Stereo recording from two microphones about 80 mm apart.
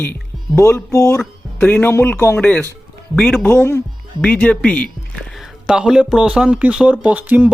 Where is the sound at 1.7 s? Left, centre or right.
Left.